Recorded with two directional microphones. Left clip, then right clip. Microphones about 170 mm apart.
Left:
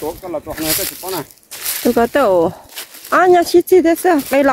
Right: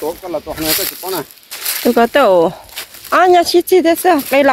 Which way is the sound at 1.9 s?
30° left (ahead or behind).